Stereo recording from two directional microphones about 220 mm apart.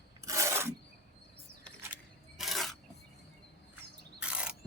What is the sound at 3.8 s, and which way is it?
Mechanisms, 5° right (ahead or behind).